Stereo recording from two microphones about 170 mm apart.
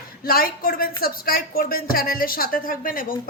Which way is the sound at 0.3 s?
60° left (ahead or behind).